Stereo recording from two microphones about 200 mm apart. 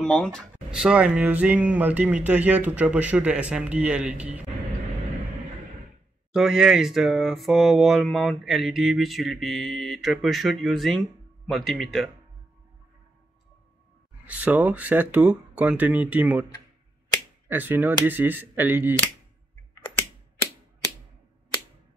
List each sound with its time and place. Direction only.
0.0 s speech: 5° left (ahead or behind)
6.3 s a sound: centre (ahead or behind)
14.2 s speech: 10° right (ahead or behind)
17.5 s speech: 10° right (ahead or behind)